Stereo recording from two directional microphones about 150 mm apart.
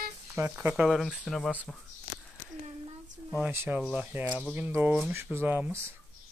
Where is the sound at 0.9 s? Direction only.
Centre (ahead or behind).